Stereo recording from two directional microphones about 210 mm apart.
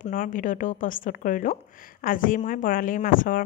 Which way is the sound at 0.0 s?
40° left (ahead or behind).